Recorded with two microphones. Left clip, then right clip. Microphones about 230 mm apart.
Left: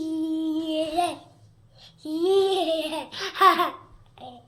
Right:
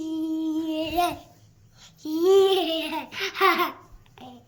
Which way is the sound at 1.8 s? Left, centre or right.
Centre.